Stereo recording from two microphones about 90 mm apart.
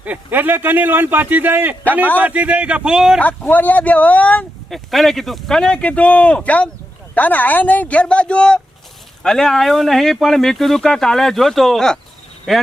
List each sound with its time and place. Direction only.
0.0 s a man's voice: 20° right (ahead or behind)
3.2 s speech: 20° left (ahead or behind)
4.7 s speech: centre (ahead or behind)